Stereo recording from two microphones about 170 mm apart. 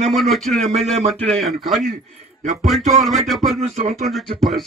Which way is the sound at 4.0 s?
Centre (ahead or behind).